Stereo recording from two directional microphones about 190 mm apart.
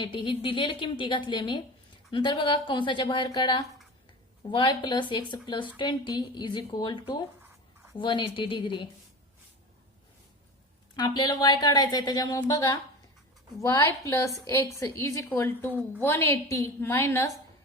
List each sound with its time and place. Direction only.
0.0 s a woman's voice: 25° left (ahead or behind)
10.9 s a woman's voice: 20° left (ahead or behind)